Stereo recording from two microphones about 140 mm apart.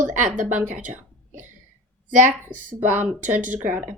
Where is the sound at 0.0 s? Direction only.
65° right (ahead or behind).